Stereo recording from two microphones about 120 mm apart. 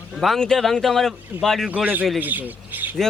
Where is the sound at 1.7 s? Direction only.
15° right (ahead or behind).